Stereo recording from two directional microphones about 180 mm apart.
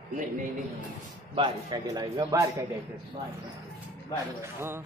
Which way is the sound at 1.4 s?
20° right (ahead or behind).